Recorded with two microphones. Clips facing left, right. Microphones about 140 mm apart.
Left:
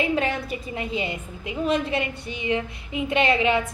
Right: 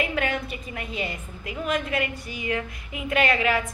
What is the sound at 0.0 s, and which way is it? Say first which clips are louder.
A woman's voice: left 3 dB; 30° left (ahead or behind).